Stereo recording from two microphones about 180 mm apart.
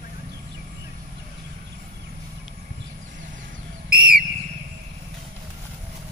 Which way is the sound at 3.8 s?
55° right (ahead or behind).